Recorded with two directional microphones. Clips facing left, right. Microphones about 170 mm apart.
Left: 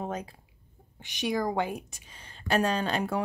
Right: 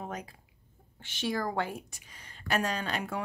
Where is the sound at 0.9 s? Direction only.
15° left (ahead or behind).